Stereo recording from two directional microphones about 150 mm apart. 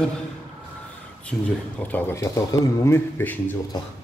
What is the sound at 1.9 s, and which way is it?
Speech, 20° left (ahead or behind).